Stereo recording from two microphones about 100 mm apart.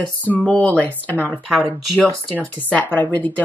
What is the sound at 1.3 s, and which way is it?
Speech, 10° right (ahead or behind).